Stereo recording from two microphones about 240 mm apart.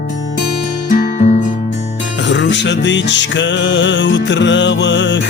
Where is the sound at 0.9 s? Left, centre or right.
Left.